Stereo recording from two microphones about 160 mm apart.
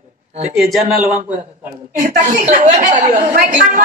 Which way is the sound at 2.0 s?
50° right (ahead or behind).